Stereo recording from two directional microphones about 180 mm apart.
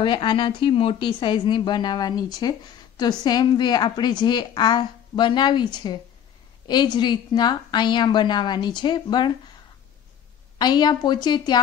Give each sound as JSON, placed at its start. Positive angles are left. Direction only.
{"t": 0.0, "sound": "a woman's voice", "side_deg": 25}
{"t": 10.6, "sound": "a woman's voice", "side_deg": 25}